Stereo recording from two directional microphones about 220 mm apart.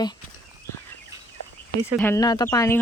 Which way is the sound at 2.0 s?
10° left (ahead or behind).